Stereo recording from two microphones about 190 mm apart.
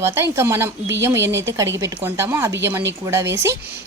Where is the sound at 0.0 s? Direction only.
15° right (ahead or behind).